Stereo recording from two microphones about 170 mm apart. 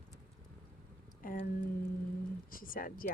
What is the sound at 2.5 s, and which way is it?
Speech, 55° left (ahead or behind).